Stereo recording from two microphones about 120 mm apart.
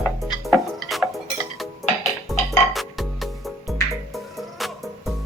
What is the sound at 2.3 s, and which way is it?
Music, centre (ahead or behind).